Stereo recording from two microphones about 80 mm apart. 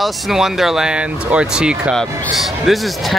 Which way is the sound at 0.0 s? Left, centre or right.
Centre.